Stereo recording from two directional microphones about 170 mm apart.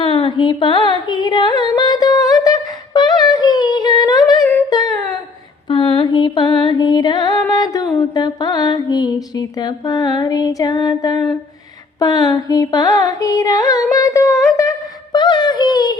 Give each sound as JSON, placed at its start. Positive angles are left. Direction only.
{"t": 0.0, "sound": "a sound", "side_deg": 30}
{"t": 0.9, "sound": "singing", "side_deg": 25}
{"t": 4.7, "sound": "humming", "side_deg": 25}
{"t": 5.6, "sound": "mantra", "side_deg": 30}
{"t": 6.6, "sound": "music", "side_deg": 25}
{"t": 7.5, "sound": "a sound", "side_deg": 20}
{"t": 8.1, "sound": "mantra", "side_deg": 25}
{"t": 11.9, "sound": "music", "side_deg": 25}
{"t": 13.9, "sound": "humming", "side_deg": 20}
{"t": 14.5, "sound": "a sound", "side_deg": 20}